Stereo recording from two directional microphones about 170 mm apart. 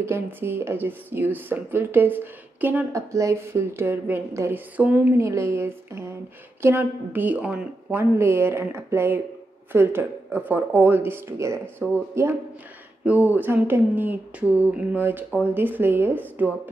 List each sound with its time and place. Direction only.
0.0 s speech: 15° right (ahead or behind)